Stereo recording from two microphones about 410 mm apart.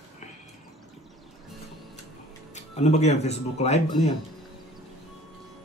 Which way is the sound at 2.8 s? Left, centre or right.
Centre.